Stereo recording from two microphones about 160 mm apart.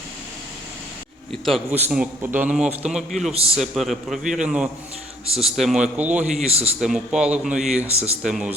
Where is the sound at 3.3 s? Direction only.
35° right (ahead or behind).